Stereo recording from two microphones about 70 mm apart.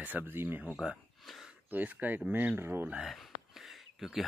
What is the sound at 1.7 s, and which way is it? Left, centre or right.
Speech, right.